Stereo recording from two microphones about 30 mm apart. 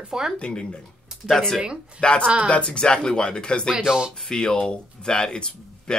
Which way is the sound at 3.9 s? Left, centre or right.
Right.